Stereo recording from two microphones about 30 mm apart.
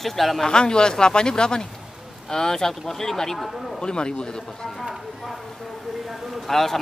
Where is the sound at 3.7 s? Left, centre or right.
Left.